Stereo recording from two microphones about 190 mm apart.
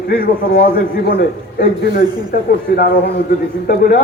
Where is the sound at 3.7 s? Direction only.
50° left (ahead or behind).